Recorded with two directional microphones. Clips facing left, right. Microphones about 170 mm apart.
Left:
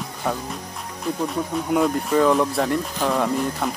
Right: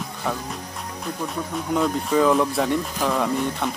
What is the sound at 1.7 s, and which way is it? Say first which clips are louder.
Speech: left 1 dB; centre (ahead or behind).